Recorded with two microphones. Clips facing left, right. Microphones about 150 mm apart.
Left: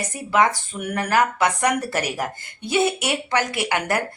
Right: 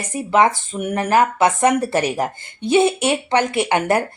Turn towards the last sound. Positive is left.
turn(degrees=-25)  # may be behind; listen again after turning